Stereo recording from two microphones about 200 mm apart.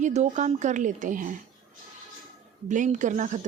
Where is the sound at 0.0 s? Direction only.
35° right (ahead or behind).